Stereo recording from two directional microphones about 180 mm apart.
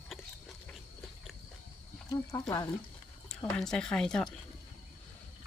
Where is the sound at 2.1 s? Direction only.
20° left (ahead or behind).